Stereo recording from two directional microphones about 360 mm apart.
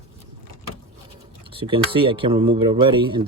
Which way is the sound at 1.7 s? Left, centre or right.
Centre.